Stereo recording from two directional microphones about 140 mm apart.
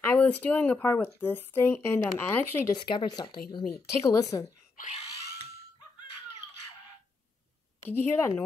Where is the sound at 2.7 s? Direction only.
30° left (ahead or behind).